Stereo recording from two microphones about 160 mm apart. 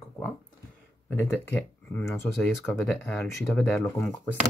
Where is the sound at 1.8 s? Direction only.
15° left (ahead or behind).